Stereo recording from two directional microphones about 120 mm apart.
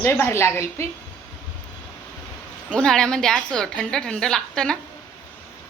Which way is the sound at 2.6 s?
10° left (ahead or behind).